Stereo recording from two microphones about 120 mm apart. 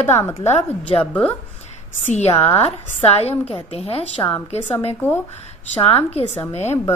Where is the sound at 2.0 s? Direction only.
65° left (ahead or behind).